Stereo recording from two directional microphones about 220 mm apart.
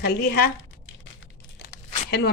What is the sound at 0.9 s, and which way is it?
Crumpling, 55° left (ahead or behind).